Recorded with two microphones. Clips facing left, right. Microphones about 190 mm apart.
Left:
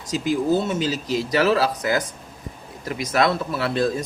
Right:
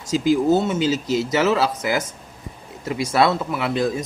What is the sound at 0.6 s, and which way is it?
Speech, 25° right (ahead or behind).